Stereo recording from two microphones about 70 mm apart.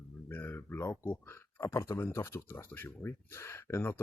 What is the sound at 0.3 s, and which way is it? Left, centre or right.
Speech, left.